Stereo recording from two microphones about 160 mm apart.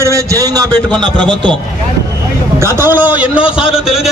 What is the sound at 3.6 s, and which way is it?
Speech, 35° left (ahead or behind).